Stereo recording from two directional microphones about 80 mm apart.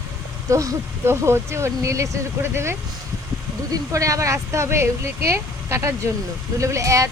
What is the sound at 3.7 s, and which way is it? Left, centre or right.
Speech, right.